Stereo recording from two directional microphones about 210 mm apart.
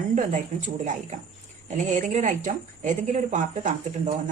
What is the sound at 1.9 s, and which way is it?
Speech, 35° right (ahead or behind).